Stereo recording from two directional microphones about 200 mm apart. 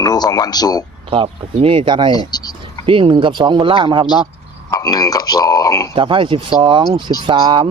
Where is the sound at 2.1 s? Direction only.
20° left (ahead or behind).